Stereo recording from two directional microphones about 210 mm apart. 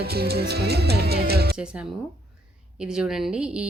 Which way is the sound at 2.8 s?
5° right (ahead or behind).